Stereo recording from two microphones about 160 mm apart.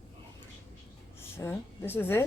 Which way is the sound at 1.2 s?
15° left (ahead or behind).